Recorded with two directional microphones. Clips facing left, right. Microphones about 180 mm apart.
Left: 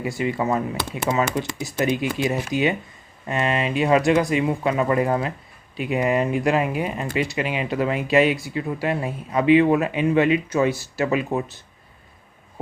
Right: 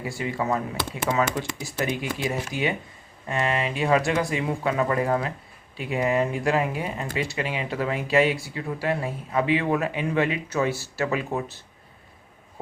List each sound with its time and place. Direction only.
0.2 s speech: 20° left (ahead or behind)